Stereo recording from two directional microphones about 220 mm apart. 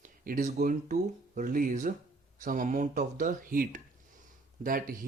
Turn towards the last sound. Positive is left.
turn(degrees=-40)  # may be behind; listen again after turning